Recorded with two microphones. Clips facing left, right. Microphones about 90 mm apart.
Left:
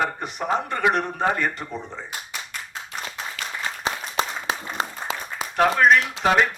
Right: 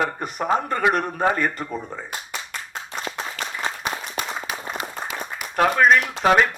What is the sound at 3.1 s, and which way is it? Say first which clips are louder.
Applause: right 5 dB; 45° right (ahead or behind).